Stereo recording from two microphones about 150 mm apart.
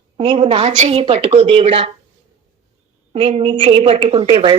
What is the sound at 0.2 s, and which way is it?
A woman's voice, 35° right (ahead or behind).